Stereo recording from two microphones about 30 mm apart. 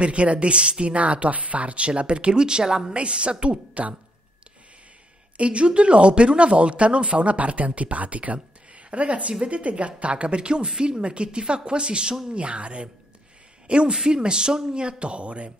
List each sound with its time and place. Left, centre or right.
0.0 s speech: right
0.9 s speech: right
1.9 s speech: right
2.9 s speech: right
5.4 s a man's voice: right